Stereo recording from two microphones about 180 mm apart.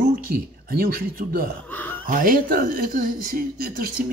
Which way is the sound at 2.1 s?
50° right (ahead or behind).